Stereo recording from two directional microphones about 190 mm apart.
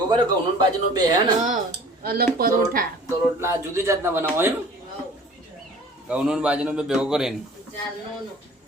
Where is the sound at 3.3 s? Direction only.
15° right (ahead or behind).